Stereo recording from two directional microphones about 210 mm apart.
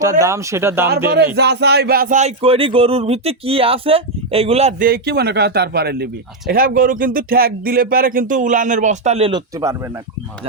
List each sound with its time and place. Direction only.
0.2 s speech: 15° right (ahead or behind)
1.4 s speech: 50° right (ahead or behind); by 4.9 s 30° right (ahead or behind)
4.9 s speech: 50° right (ahead or behind); by 9.4 s 30° right (ahead or behind)
9.6 s speech: 15° right (ahead or behind)